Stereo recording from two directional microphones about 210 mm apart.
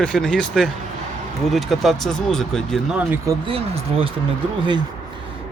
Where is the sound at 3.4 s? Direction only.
25° right (ahead or behind).